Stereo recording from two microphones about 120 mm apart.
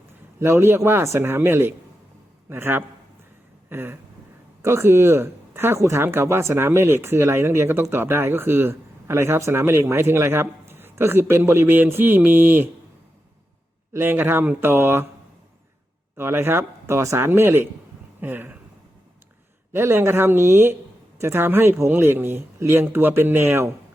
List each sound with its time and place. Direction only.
0.3 s speech: 20° right (ahead or behind)
3.7 s a sound: 20° right (ahead or behind)
4.6 s speech: 20° right (ahead or behind)
13.9 s speech: 20° right (ahead or behind)
16.1 s speech: 20° right (ahead or behind)
19.7 s speech: 20° right (ahead or behind)